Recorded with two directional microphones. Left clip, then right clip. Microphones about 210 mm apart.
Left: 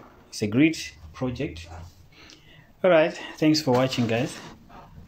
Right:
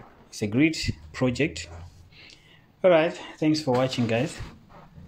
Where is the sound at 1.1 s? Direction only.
35° right (ahead or behind).